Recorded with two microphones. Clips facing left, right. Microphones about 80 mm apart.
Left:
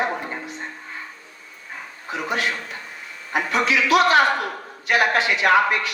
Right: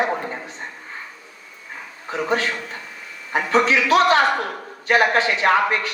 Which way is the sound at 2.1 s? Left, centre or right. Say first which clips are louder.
Right 3 dB; right.